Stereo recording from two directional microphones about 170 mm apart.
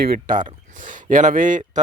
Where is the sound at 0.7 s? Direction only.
50° right (ahead or behind).